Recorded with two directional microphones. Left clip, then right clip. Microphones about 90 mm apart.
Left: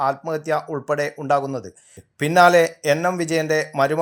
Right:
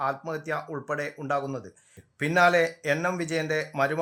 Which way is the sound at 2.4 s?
35° left (ahead or behind).